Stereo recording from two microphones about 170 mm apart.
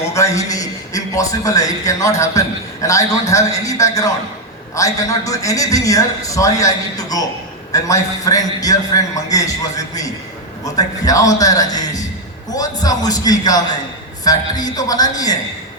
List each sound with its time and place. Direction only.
0.1 s a man's voice: 20° left (ahead or behind)
7.7 s a man's voice: 20° left (ahead or behind)